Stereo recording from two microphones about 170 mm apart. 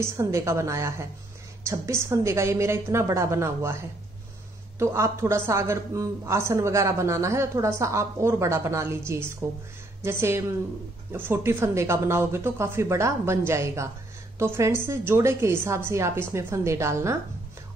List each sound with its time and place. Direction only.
0.0 s speech: 15° right (ahead or behind)
4.7 s speech: 15° right (ahead or behind)